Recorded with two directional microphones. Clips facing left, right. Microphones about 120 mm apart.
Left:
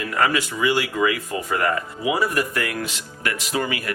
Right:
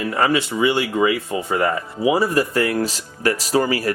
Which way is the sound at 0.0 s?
25° right (ahead or behind).